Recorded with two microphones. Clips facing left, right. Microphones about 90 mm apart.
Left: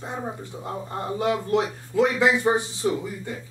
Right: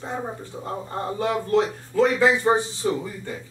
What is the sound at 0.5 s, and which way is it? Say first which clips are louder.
Speech: right 1 dB; 20° right (ahead or behind).